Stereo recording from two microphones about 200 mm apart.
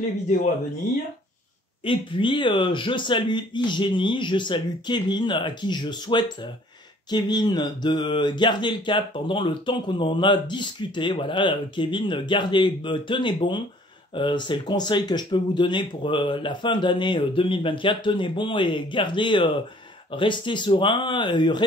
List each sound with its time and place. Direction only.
1.9 s speech: 25° left (ahead or behind)